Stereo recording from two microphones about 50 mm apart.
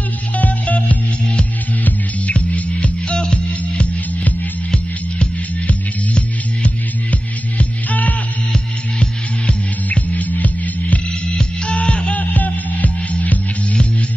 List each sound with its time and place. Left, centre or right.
0.4 s music: left
3.4 s music: left
9.8 s music: left